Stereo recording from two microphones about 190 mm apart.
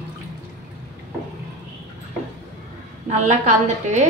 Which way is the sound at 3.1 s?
40° right (ahead or behind).